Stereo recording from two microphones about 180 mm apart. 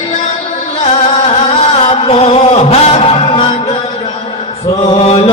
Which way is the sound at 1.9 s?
30° left (ahead or behind).